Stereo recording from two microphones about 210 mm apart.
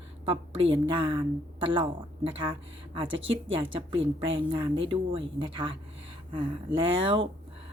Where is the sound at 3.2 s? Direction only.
65° right (ahead or behind).